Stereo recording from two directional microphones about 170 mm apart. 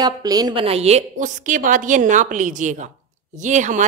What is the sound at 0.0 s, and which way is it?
A woman's voice, 20° right (ahead or behind).